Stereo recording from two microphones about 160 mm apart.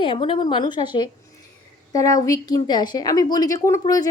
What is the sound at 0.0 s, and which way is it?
A woman's voice, 30° left (ahead or behind).